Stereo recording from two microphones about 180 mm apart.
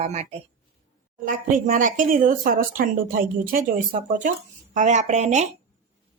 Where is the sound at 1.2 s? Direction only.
50° right (ahead or behind).